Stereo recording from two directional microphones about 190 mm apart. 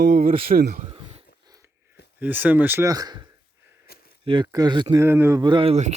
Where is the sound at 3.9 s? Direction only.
55° left (ahead or behind).